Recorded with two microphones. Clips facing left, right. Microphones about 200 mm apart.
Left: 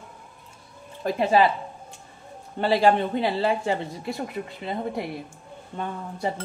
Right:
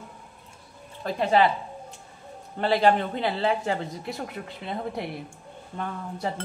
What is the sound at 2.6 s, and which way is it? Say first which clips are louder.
Speech: left 1 dB; 5° left (ahead or behind).